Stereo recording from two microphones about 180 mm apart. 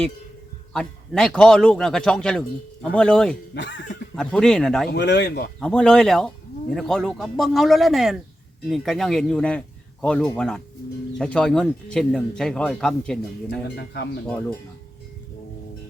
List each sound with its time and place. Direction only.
0.7 s speech: 5° left (ahead or behind)
3.5 s speech: 80° left
4.1 s speech: 5° left (ahead or behind)
4.9 s speech: 75° left (ahead or behind)
5.5 s speech: 5° left (ahead or behind)
13.7 s speech: 65° left (ahead or behind)